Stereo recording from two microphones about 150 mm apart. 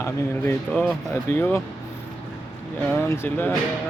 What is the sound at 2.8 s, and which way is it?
Speech, 15° left (ahead or behind).